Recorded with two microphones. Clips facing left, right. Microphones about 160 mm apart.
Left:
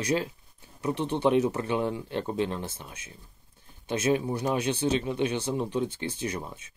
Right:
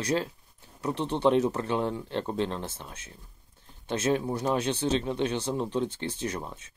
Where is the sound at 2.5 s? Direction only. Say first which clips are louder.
Even; 25° right (ahead or behind).